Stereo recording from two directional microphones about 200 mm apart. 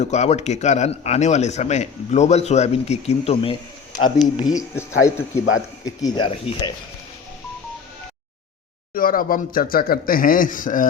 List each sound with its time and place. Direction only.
0.0 s speech: 35° left (ahead or behind)
4.4 s speech: 20° left (ahead or behind)
8.9 s speech: 45° left (ahead or behind)